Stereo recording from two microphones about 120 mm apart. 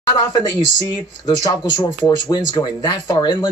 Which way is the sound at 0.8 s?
35° left (ahead or behind).